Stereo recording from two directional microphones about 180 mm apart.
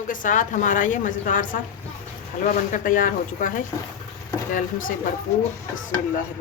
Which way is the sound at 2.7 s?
50° left (ahead or behind).